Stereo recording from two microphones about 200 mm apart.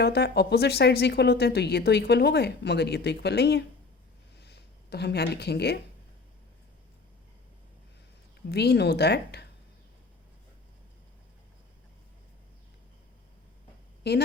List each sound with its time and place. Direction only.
0.0 s a woman's voice: 55° left (ahead or behind)
4.4 s a sound: 55° left (ahead or behind)
8.4 s a woman's voice: 55° left (ahead or behind)
14.0 s a woman's voice: 55° left (ahead or behind)